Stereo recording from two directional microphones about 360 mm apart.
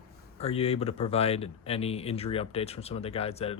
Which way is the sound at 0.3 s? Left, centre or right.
Centre.